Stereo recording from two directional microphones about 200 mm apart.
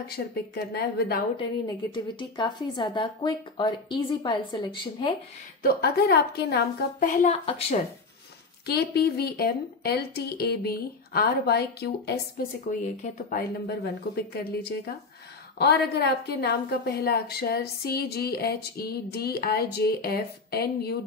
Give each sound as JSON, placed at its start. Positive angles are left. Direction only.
{"t": 0.1, "sound": "a woman's voice", "side_deg": 50}
{"t": 2.1, "sound": "speech", "side_deg": 20}
{"t": 5.6, "sound": "a woman's voice", "side_deg": 55}
{"t": 7.2, "sound": "a woman's voice", "side_deg": 35}
{"t": 8.6, "sound": "a woman's voice", "side_deg": 55}
{"t": 15.9, "sound": "a woman's voice", "side_deg": 55}